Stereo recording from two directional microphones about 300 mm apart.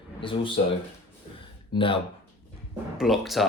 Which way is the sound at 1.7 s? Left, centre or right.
Centre.